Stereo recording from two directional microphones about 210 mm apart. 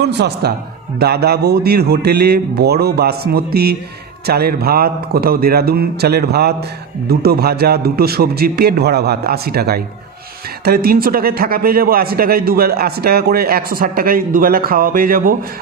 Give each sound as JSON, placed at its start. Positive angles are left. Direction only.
{"t": 0.0, "sound": "a man's voice", "side_deg": -50}